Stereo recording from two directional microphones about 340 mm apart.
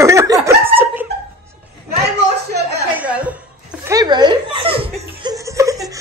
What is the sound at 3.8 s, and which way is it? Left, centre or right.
Laughter, centre.